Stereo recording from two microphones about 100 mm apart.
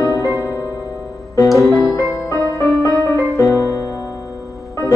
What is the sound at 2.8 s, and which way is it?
Music, 30° right (ahead or behind).